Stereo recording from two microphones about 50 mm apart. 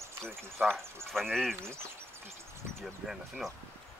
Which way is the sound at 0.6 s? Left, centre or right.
Right.